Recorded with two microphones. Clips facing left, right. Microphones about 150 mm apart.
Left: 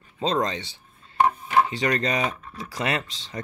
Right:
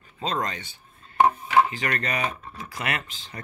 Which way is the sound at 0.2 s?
25° left (ahead or behind).